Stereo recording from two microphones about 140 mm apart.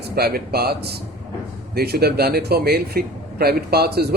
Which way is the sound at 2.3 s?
90° right.